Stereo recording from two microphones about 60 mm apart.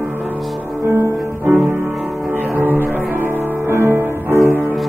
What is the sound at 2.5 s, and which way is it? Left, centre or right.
Music, right.